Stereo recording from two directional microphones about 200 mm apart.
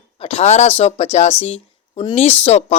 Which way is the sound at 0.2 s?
30° left (ahead or behind).